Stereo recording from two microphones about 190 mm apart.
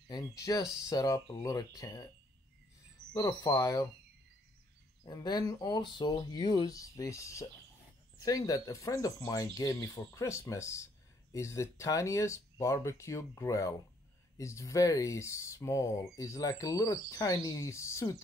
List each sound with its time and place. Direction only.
0.4 s speech: 20° left (ahead or behind)
3.2 s speech: 15° left (ahead or behind)
5.0 s speech: 20° left (ahead or behind)